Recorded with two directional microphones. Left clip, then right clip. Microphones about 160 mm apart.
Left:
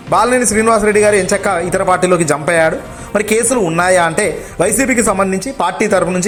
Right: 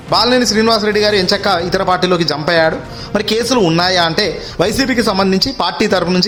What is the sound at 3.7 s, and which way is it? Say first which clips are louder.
A man's voice: left 1 dB; 20° right (ahead or behind).